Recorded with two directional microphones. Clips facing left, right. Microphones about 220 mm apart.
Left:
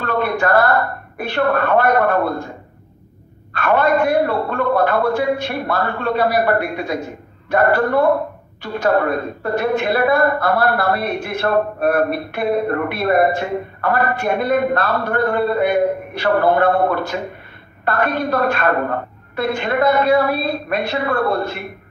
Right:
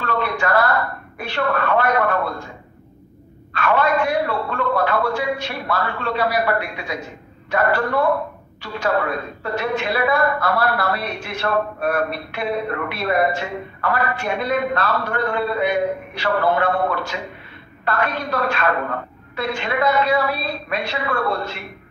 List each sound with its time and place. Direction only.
0.0 s a woman's voice: 50° left (ahead or behind)
3.5 s a woman's voice: 55° left (ahead or behind)